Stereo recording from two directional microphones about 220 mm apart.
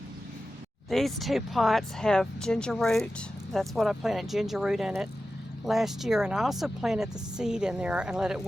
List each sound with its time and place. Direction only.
0.9 s speech: centre (ahead or behind)